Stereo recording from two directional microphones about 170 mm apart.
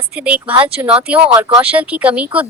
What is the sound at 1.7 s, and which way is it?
Speech, 10° right (ahead or behind).